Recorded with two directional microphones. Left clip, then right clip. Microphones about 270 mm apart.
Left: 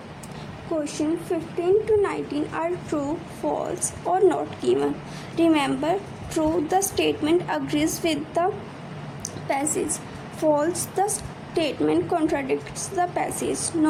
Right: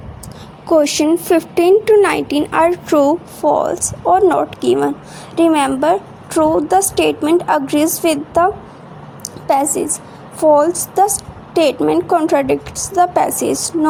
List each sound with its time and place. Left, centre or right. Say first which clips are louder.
0.7 s a woman's voice: right 14 dB; right
9.2 s a sound: right 11 dB; centre
10.4 s a woman's voice: right 11 dB; centre